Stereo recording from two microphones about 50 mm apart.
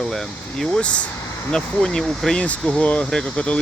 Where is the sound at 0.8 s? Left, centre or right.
Left; by 2.3 s centre.